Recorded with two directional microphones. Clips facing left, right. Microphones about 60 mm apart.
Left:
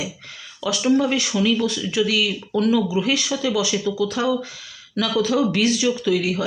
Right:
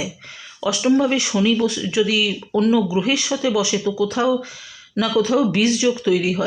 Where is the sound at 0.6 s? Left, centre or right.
Right.